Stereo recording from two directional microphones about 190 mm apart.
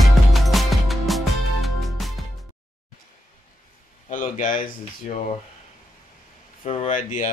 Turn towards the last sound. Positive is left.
turn(degrees=40)  # may be behind; listen again after turning